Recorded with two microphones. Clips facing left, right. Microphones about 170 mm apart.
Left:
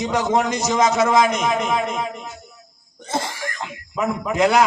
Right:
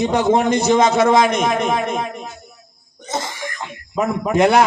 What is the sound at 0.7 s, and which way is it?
Speech, 30° right (ahead or behind).